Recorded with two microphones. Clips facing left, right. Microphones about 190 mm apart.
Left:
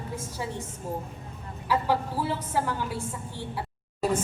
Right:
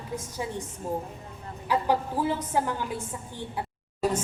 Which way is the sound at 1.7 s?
15° right (ahead or behind).